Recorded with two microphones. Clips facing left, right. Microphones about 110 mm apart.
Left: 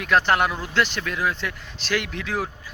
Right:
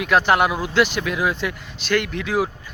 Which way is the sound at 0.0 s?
5° right (ahead or behind).